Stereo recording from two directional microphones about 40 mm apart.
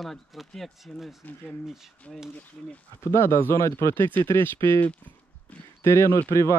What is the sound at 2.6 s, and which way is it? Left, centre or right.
Speech, centre.